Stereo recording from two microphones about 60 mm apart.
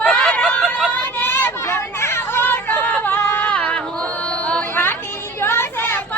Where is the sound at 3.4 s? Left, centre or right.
Left.